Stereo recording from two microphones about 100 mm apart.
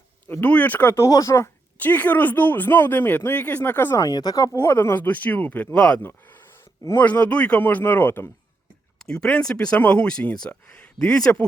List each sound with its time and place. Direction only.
0.3 s speech: 20° left (ahead or behind)
0.9 s speech: 35° left (ahead or behind)
1.8 s speech: 15° left (ahead or behind)
3.9 s speech: 40° left (ahead or behind)
4.5 s speech: 25° left (ahead or behind)
9.0 s speech: 5° left (ahead or behind)